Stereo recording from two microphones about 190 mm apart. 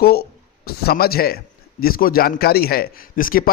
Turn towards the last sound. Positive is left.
turn(degrees=45)  # may be behind; listen again after turning